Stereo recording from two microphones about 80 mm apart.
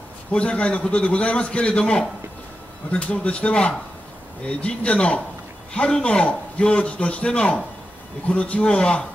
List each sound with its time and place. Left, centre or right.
0.3 s a man's voice: centre